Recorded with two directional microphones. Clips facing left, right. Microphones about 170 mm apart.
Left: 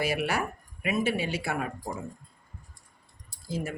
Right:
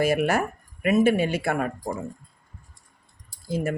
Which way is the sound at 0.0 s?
45° right (ahead or behind).